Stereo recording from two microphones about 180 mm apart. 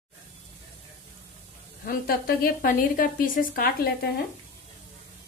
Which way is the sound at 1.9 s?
55° left (ahead or behind).